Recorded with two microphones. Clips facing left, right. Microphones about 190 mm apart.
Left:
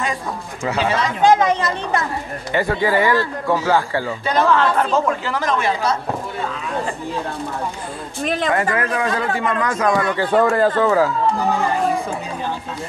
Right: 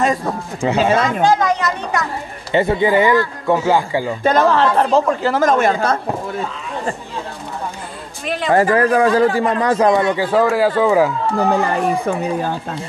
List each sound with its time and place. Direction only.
0.0 s a man's voice: 40° right (ahead or behind)
1.2 s speech: 20° left (ahead or behind)
2.5 s speech: 25° right (ahead or behind)
4.2 s speech: 45° right (ahead or behind)
8.5 s a man's voice: 35° right (ahead or behind)
10.1 s speech: 5° right (ahead or behind)